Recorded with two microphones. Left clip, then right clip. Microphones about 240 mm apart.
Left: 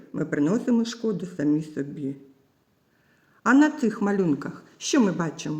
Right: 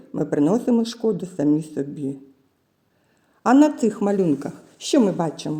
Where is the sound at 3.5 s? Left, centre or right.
Centre.